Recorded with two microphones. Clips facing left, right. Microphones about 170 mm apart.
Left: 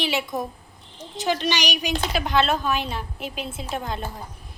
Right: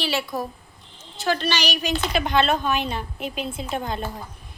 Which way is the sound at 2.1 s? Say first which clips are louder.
Right 1 dB; centre (ahead or behind).